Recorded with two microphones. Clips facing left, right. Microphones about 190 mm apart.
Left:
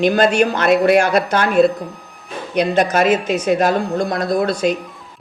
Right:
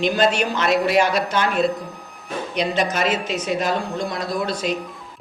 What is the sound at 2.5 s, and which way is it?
Speech, 60° left (ahead or behind).